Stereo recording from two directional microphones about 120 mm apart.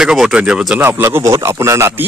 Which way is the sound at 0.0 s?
5° right (ahead or behind).